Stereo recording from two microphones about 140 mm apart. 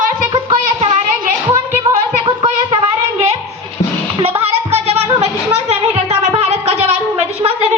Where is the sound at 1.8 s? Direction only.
40° right (ahead or behind).